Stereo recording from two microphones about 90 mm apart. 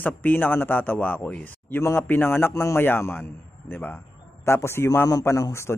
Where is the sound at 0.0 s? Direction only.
20° left (ahead or behind).